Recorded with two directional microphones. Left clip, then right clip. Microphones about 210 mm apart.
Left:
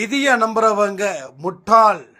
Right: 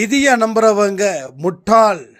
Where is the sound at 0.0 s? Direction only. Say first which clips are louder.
Right 3 dB; 55° right (ahead or behind).